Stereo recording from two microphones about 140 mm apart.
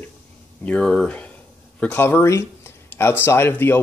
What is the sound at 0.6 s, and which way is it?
Speech, 5° left (ahead or behind).